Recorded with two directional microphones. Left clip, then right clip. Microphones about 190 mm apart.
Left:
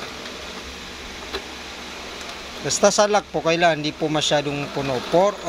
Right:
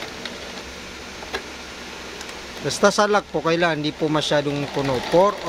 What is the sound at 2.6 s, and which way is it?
Speech, 20° right (ahead or behind).